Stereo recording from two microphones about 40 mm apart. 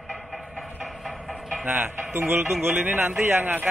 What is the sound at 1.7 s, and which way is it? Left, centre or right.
Speech, right.